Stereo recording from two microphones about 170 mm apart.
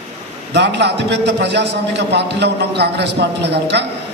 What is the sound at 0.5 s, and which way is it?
A man's voice, 90° right.